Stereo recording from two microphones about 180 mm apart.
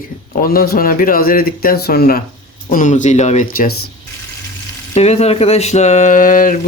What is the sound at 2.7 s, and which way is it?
Speech, 45° left (ahead or behind).